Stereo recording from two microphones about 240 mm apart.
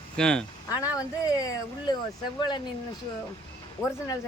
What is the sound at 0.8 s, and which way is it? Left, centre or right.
Speech, centre.